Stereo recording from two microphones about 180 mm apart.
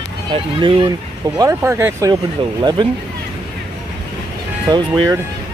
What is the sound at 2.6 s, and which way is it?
Speech, 25° right (ahead or behind).